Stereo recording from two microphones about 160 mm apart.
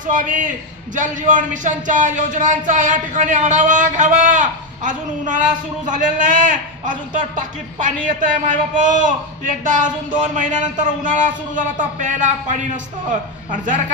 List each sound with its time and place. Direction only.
0.0 s a man's voice: 55° right (ahead or behind)